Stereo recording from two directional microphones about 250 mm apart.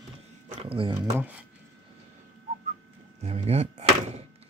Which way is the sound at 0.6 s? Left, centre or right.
Right.